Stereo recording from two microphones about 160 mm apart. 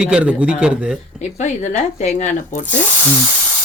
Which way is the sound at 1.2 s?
45° left (ahead or behind).